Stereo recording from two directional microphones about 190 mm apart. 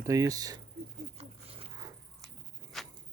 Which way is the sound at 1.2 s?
30° right (ahead or behind).